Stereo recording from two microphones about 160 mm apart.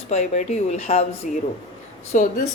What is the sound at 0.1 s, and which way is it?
Speech, 45° left (ahead or behind).